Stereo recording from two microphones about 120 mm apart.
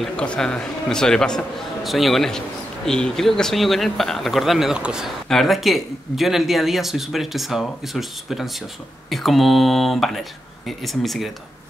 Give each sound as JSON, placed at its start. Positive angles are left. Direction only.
{"t": 0.0, "sound": "a man's voice", "side_deg": 5}